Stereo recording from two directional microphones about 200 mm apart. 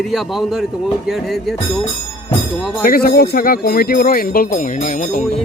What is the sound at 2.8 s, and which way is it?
Speech, 50° left (ahead or behind).